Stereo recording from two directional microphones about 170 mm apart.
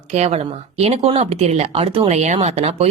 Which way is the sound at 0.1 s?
40° right (ahead or behind).